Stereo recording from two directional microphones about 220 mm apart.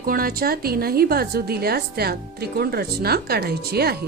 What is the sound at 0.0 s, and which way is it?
Speech, 40° right (ahead or behind).